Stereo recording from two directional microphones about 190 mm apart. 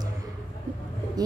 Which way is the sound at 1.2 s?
20° right (ahead or behind).